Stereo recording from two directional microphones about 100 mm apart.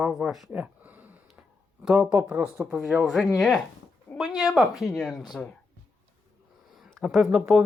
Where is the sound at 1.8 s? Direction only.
10° right (ahead or behind).